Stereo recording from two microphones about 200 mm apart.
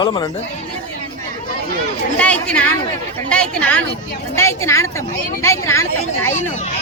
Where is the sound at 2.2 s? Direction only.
5° left (ahead or behind).